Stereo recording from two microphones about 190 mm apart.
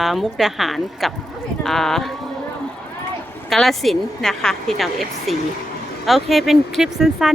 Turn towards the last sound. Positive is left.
turn(degrees=0)  # may be behind; listen again after turning